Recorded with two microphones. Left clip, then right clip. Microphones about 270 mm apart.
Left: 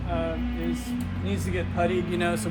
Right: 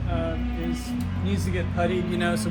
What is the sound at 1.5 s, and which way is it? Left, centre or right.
Speech, left.